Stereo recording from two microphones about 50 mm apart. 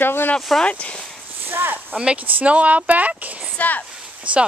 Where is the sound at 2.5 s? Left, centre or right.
Right.